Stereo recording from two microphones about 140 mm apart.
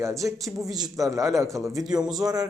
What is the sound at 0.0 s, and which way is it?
A man's voice, 20° right (ahead or behind).